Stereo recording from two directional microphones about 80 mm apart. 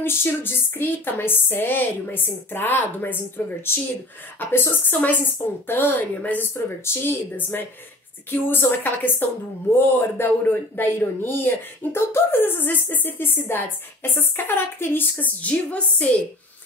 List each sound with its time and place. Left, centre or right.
0.0 s speech: left